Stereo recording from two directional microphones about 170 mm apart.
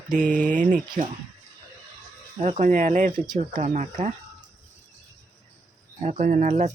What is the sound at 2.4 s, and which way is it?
Speech, 45° right (ahead or behind).